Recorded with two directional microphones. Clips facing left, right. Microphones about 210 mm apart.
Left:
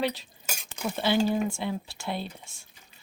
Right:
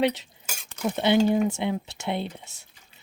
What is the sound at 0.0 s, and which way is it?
Speech, 20° right (ahead or behind).